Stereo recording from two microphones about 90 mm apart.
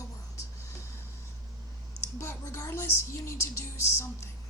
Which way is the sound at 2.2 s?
30° left (ahead or behind).